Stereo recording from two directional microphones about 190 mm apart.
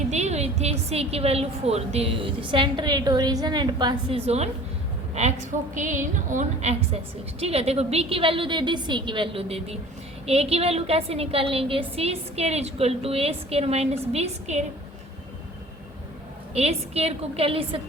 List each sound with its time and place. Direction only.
0.1 s a woman's voice: 35° right (ahead or behind)
16.6 s a woman's voice: 35° right (ahead or behind)